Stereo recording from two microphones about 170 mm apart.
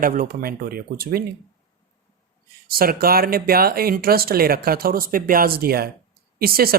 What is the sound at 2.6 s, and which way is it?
Speech, 60° right (ahead or behind).